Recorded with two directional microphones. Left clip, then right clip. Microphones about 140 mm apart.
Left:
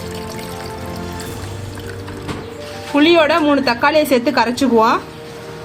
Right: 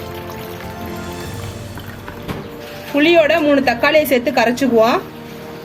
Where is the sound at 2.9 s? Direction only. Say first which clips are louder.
Even; 45° left (ahead or behind).